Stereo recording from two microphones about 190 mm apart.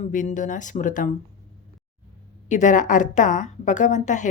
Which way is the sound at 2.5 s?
40° left (ahead or behind).